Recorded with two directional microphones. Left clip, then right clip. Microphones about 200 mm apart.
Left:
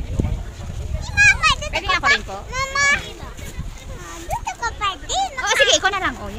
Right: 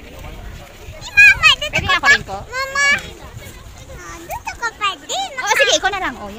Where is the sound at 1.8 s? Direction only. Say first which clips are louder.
Right 3 dB; 20° right (ahead or behind).